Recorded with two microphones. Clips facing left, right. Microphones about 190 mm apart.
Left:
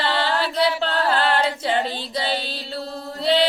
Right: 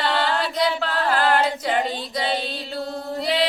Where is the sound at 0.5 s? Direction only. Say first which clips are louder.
Left 2 dB; 30° left (ahead or behind).